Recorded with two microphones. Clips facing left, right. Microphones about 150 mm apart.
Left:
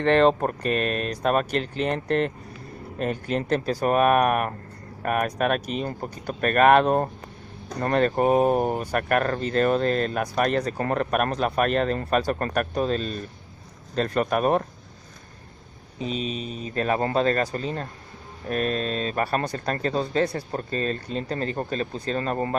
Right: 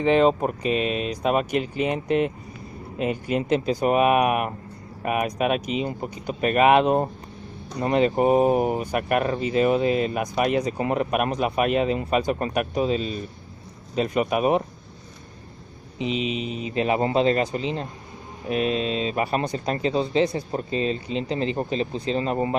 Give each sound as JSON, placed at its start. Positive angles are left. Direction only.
{"t": 0.0, "sound": "speech", "side_deg": -10}
{"t": 16.0, "sound": "mantra", "side_deg": 40}
{"t": 16.5, "sound": "speech", "side_deg": -15}
{"t": 18.5, "sound": "speech", "side_deg": -10}